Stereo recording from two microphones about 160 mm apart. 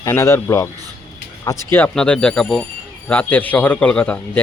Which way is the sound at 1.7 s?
5° left (ahead or behind).